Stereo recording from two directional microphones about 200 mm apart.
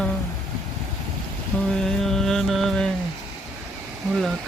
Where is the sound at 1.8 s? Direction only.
5° left (ahead or behind).